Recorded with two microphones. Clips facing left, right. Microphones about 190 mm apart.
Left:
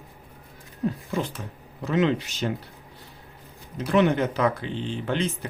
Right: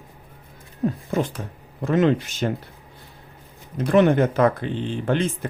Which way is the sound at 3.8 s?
50° right (ahead or behind).